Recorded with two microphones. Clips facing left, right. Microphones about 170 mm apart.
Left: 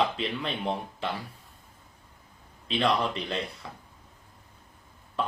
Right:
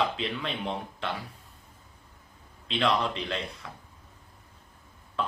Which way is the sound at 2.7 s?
5° left (ahead or behind).